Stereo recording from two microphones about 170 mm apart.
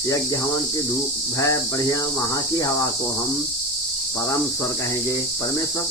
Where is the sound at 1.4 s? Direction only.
20° left (ahead or behind).